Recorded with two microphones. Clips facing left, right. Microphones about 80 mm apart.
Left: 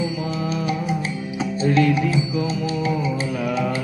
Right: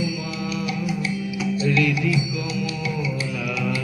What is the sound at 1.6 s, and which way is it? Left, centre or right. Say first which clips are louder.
Music: left 4 dB; left.